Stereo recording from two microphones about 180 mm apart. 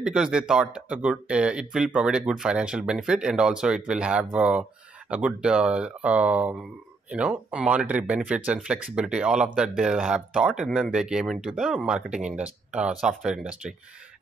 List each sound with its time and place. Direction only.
0.0 s speech: 5° right (ahead or behind)